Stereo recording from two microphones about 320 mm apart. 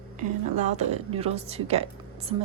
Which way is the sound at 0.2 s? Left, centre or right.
Right.